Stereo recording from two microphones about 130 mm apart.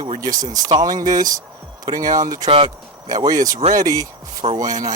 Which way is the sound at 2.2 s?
30° right (ahead or behind).